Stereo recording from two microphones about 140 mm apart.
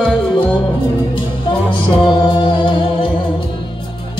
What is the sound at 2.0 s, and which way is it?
Music, 35° left (ahead or behind).